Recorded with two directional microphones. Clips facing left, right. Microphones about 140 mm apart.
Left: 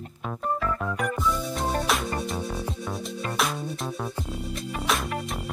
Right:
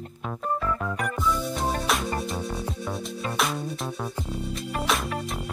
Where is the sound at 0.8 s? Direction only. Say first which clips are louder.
Even; centre (ahead or behind).